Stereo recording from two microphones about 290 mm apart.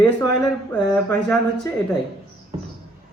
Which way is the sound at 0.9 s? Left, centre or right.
Centre.